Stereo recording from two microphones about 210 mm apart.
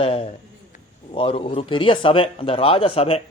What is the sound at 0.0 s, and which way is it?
A man's voice, 25° left (ahead or behind).